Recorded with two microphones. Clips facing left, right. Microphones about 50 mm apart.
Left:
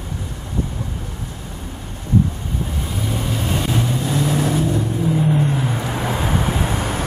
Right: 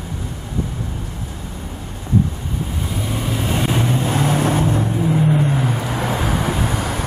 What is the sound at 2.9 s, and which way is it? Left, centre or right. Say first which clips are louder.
Vehicle: right 1 dB; centre.